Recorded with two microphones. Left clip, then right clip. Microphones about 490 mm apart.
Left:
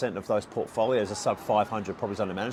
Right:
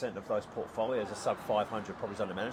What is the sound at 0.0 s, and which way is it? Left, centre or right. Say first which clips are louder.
Speech: left 6 dB; left.